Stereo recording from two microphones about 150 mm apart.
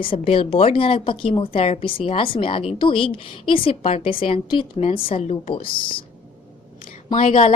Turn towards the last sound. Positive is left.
turn(degrees=50)  # may be behind; listen again after turning